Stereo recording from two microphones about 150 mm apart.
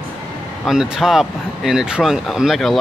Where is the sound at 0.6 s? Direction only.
5° right (ahead or behind).